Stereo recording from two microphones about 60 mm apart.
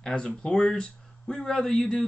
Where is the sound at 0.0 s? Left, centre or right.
Centre.